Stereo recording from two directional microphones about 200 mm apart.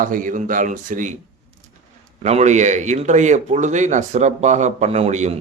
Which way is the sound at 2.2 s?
35° right (ahead or behind).